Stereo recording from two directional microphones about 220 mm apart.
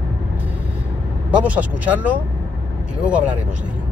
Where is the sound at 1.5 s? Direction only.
5° right (ahead or behind).